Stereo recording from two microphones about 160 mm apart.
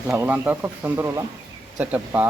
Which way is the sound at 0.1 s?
15° right (ahead or behind).